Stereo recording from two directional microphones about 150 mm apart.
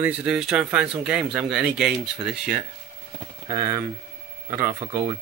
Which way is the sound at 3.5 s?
20° right (ahead or behind).